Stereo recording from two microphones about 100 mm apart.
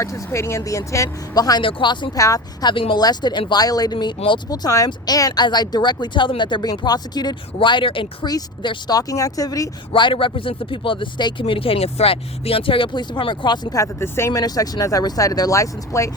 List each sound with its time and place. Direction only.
0.0 s speech: 30° left (ahead or behind)
1.6 s speech: 50° left (ahead or behind)
2.1 s speech: 35° left (ahead or behind); by 8.3 s 60° left (ahead or behind)
8.3 s speech: 40° left (ahead or behind)
9.9 s speech: 55° left (ahead or behind)
13.7 s speech: 30° left (ahead or behind)